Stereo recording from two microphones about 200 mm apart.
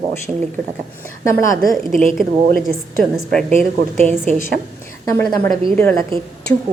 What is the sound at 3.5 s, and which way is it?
Speech, 30° right (ahead or behind).